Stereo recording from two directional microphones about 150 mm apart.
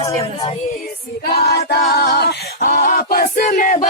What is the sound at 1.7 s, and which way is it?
A capella, 90° left.